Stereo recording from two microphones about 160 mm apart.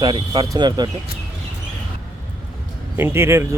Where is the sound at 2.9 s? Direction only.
15° right (ahead or behind).